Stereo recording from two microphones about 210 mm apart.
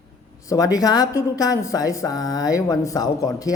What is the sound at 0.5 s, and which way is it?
A woman's voice, 15° left (ahead or behind).